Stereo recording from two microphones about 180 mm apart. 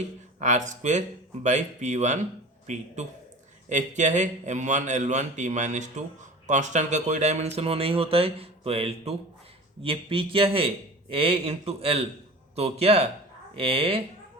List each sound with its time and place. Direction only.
0.3 s a man's voice: 40° right (ahead or behind)